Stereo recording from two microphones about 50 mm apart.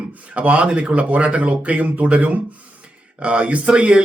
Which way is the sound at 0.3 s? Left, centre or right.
Right.